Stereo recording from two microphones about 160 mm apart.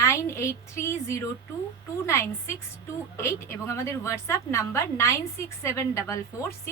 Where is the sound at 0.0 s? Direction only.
20° left (ahead or behind).